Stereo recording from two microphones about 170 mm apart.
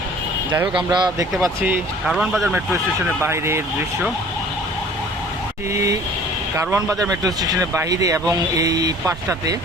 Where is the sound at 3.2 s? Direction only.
15° right (ahead or behind).